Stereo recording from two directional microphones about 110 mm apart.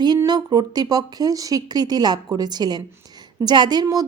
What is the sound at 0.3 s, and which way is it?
A woman's voice, 40° right (ahead or behind).